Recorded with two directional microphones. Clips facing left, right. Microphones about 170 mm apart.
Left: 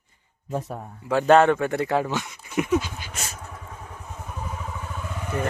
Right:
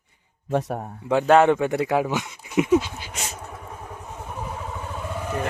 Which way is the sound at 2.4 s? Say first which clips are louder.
Right 4 dB; 20° right (ahead or behind).